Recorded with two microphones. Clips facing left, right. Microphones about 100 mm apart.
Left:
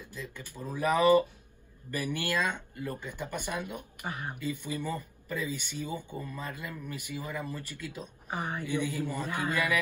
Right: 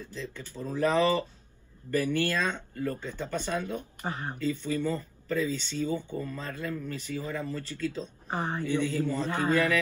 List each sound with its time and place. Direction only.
0.0 s speech: 15° left (ahead or behind)
4.0 s speech: 20° right (ahead or behind)
4.4 s speech: 15° left (ahead or behind)